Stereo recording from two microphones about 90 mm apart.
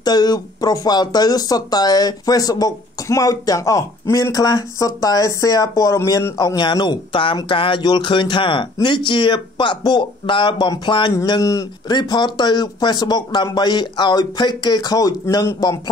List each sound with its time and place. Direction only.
0.0 s speech: 50° left (ahead or behind)